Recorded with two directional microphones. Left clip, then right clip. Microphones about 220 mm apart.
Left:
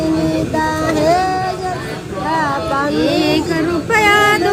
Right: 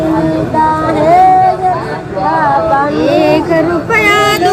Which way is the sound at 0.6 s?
35° left (ahead or behind).